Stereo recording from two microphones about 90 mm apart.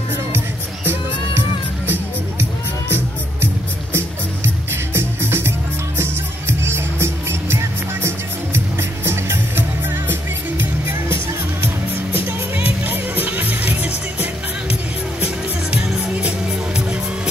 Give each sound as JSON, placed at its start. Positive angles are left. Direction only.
{"t": 4.9, "sound": "music", "side_deg": -25}
{"t": 12.3, "sound": "music", "side_deg": -20}